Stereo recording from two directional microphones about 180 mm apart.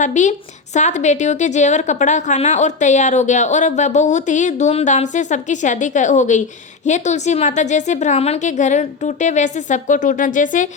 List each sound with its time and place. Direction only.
0.0 s a woman's voice: 40° left (ahead or behind)